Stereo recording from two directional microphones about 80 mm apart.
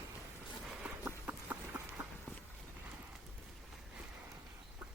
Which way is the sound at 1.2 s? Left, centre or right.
Centre.